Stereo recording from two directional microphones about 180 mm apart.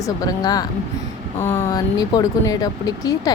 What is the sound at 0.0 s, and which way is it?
Speech, 20° left (ahead or behind).